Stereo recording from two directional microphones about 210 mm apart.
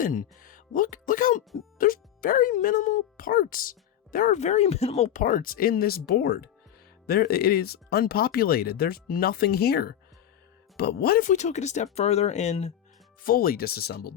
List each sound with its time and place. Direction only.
0.0 s speech: 40° left (ahead or behind)
13.2 s speech: 45° left (ahead or behind)